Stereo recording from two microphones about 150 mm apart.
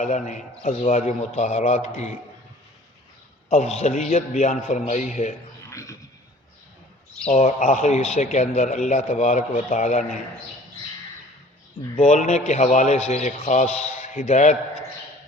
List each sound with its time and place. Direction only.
0.0 s a man's voice: 55° left (ahead or behind)
3.5 s a man's voice: 45° left (ahead or behind)
5.7 s a sound: 20° left (ahead or behind)
7.3 s a man's voice: 50° left (ahead or behind)
11.9 s a man's voice: 45° left (ahead or behind)